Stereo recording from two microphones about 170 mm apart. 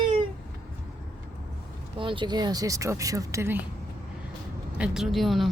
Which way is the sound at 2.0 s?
30° right (ahead or behind).